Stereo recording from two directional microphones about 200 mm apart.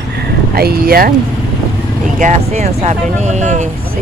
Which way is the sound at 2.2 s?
35° right (ahead or behind).